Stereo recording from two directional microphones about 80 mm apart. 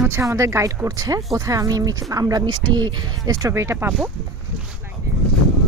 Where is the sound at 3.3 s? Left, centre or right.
Right.